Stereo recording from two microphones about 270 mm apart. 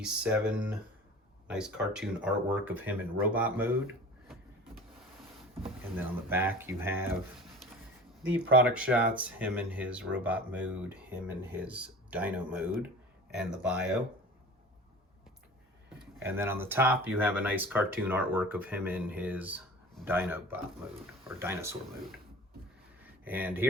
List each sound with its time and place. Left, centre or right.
0.0 s speech: centre
5.6 s speech: centre
16.2 s speech: centre
23.2 s speech: centre